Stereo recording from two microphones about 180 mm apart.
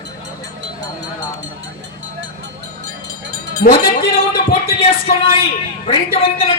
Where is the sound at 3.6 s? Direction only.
55° left (ahead or behind).